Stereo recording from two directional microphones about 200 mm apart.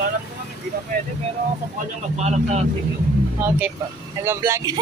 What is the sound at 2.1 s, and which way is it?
Speech, 35° right (ahead or behind).